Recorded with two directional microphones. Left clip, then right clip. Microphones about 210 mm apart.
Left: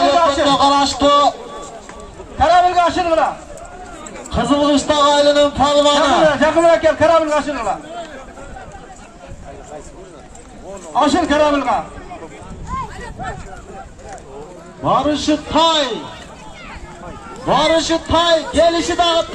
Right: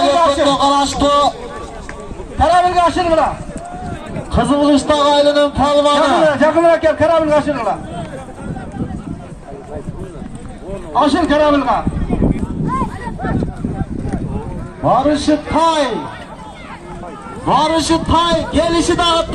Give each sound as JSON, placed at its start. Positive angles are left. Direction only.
{"t": 0.0, "sound": "a sound", "side_deg": -25}
{"t": 2.3, "sound": "a sound", "side_deg": -15}
{"t": 4.3, "sound": "a man's voice", "side_deg": -15}
{"t": 11.0, "sound": "a man's voice", "side_deg": -10}
{"t": 14.8, "sound": "a man's voice", "side_deg": -50}
{"t": 17.5, "sound": "a man's voice", "side_deg": -60}